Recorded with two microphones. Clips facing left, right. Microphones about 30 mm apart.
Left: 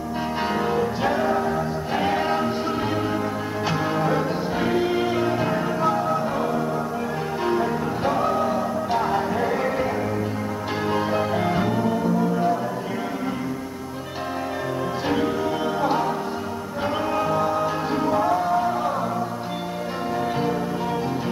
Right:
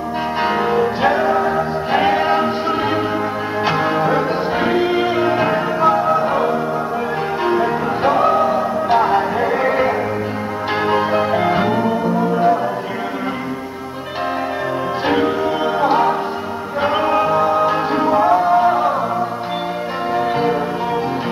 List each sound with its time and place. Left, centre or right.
0.4 s music: right
3.6 s music: right
15.0 s music: right
20.2 s music: right